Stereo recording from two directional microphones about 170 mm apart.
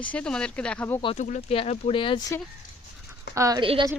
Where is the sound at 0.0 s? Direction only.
5° left (ahead or behind).